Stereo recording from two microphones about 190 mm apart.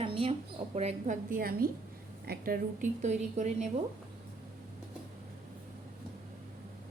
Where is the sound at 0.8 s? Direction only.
35° right (ahead or behind).